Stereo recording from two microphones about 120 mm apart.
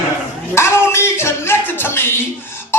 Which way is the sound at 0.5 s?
20° left (ahead or behind).